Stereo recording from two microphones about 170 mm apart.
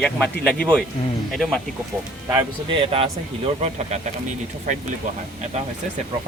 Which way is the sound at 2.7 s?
35° right (ahead or behind).